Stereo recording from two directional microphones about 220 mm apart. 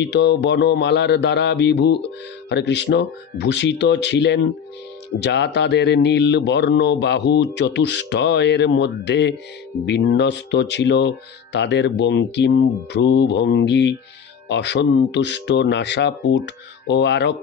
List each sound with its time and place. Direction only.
0.0 s speech: 50° left (ahead or behind)